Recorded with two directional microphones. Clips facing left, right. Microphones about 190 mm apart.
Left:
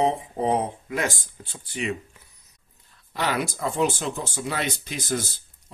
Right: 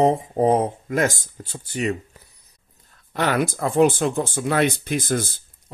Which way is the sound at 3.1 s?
55° right (ahead or behind).